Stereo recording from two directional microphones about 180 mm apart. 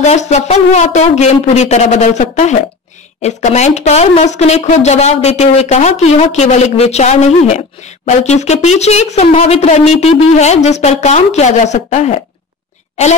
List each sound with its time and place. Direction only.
0.0 s speech: 40° left (ahead or behind)